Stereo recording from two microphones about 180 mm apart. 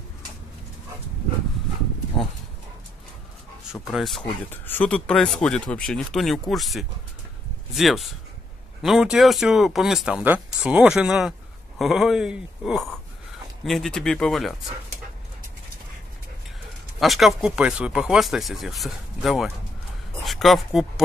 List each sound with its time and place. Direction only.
2.1 s speech: 25° left (ahead or behind)
3.8 s speech: centre (ahead or behind)
4.5 s speech: 10° left (ahead or behind)
17.0 s speech: centre (ahead or behind)